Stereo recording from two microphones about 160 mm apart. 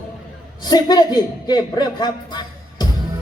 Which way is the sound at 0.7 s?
25° left (ahead or behind).